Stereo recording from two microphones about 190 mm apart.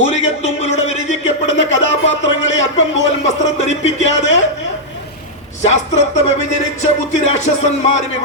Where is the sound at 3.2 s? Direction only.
35° left (ahead or behind).